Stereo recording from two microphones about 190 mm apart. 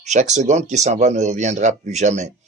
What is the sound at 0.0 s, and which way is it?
Speech, 40° right (ahead or behind).